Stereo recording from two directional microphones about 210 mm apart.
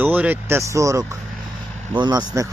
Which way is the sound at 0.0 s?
10° right (ahead or behind).